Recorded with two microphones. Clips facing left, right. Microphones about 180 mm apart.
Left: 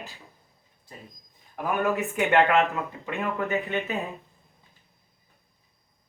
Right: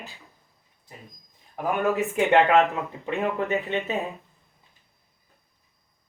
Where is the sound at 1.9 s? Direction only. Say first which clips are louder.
Right 3 dB; 35° right (ahead or behind).